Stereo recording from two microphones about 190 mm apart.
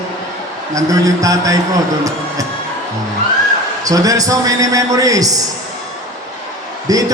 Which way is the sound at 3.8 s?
20° right (ahead or behind).